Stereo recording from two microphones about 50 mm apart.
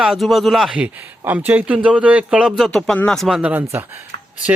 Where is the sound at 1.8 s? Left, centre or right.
Right.